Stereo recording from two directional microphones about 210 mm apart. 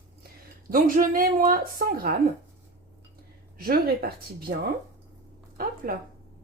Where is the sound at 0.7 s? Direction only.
40° right (ahead or behind).